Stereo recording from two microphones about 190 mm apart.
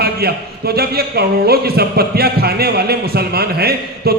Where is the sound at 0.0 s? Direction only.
55° right (ahead or behind).